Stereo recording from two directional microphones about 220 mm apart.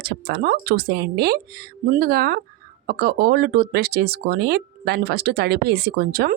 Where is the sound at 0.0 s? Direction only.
45° right (ahead or behind).